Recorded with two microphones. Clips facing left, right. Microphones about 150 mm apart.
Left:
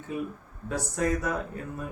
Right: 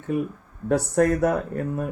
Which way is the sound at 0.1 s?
60° right (ahead or behind).